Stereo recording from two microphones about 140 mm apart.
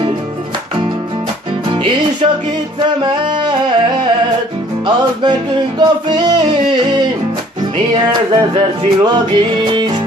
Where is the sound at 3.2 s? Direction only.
35° right (ahead or behind).